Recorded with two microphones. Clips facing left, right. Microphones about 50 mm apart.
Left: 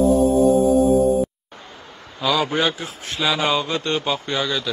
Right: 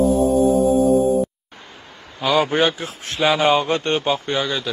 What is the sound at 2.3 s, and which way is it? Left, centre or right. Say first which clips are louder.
A man's voice: right 4 dB; right.